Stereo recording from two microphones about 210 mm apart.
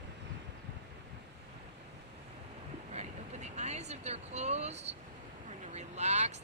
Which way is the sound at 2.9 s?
30° right (ahead or behind).